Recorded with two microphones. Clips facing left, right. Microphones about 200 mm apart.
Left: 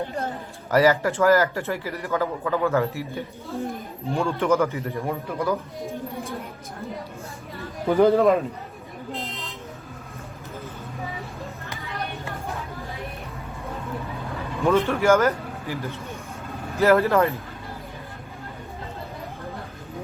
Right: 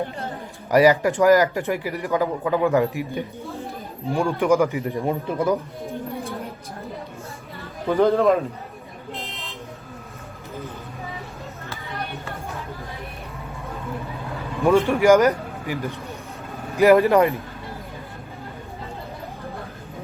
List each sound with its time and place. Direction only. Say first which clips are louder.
0.7 s speech: right 3 dB; 15° right (ahead or behind)
7.9 s a man's voice: even; 5° left (ahead or behind)
14.6 s a man's voice: right 3 dB; 15° right (ahead or behind)